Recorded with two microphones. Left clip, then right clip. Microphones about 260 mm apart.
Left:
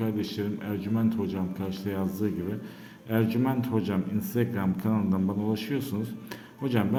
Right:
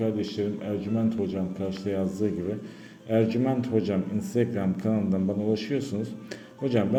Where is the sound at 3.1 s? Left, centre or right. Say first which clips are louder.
Right 3 dB; centre.